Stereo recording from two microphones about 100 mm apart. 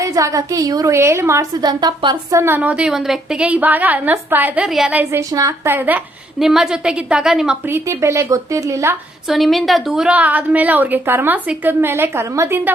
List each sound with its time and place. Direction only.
0.0 s a woman's voice: 35° right (ahead or behind)
0.9 s speech: 25° right (ahead or behind)
1.6 s speech: 50° right (ahead or behind)
2.3 s speech: 25° right (ahead or behind)
2.6 s a woman's voice: 15° right (ahead or behind)
4.6 s a woman's voice: 5° right (ahead or behind)
4.9 s a woman's voice: 15° right (ahead or behind)
5.3 s a woman's voice: 35° right (ahead or behind)
5.6 s speech: 20° right (ahead or behind)
6.4 s a woman's voice: 5° right (ahead or behind)
7.7 s speech: 25° right (ahead or behind)
9.3 s a woman's voice: centre (ahead or behind); by 12.6 s 25° right (ahead or behind)